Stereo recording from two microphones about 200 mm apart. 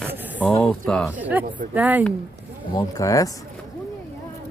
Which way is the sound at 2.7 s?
15° left (ahead or behind).